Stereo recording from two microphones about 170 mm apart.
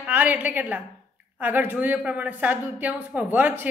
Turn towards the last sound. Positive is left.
turn(degrees=-10)  # may be behind; listen again after turning